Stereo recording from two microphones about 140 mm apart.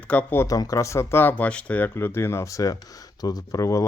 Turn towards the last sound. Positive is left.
turn(degrees=25)  # may be behind; listen again after turning